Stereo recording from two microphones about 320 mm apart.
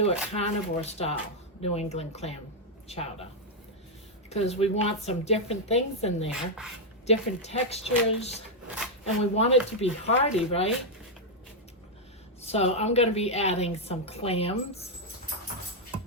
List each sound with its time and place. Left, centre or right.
0.0 s a woman's voice: centre
4.3 s a woman's voice: centre
6.3 s speech: centre
7.1 s a woman's voice: centre
9.3 s a woman's voice: centre
12.4 s a woman's voice: centre